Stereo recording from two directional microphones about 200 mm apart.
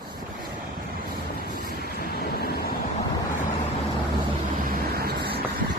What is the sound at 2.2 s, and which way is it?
Vehicle, 50° left (ahead or behind).